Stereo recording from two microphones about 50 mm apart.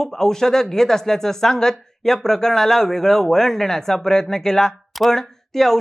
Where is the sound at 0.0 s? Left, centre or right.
Centre.